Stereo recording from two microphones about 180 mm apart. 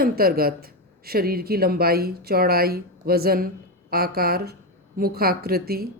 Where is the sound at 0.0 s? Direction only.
55° right (ahead or behind).